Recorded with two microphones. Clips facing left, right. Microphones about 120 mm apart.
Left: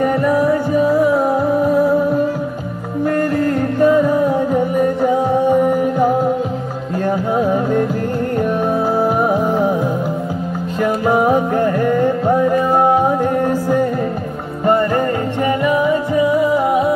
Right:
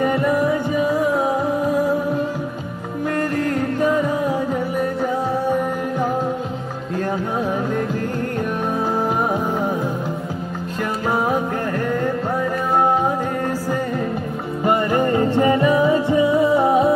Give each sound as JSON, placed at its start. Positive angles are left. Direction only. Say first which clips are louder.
{"t": 0.0, "sound": "music", "louder": "left 3 dB", "side_deg": 0}
{"t": 3.2, "sound": "music", "louder": "left 3 dB", "side_deg": 0}
{"t": 5.5, "sound": "music", "louder": "left 7 dB", "side_deg": 15}
{"t": 9.0, "sound": "music", "louder": "left 5 dB", "side_deg": 10}
{"t": 10.8, "sound": "music", "louder": "left 7 dB", "side_deg": 15}
{"t": 15.3, "sound": "music", "louder": "left 1 dB", "side_deg": -30}